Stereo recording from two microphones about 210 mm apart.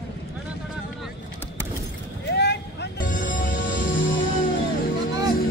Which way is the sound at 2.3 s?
55° left (ahead or behind).